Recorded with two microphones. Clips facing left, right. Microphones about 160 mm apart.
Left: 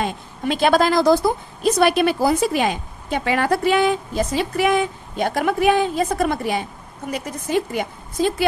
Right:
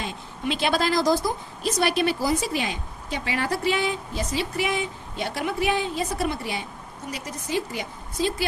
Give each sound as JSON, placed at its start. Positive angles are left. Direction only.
{"t": 0.0, "sound": "a woman's voice", "side_deg": 50}